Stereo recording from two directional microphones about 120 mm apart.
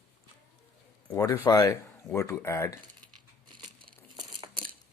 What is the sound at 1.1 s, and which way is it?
Speech, 25° left (ahead or behind).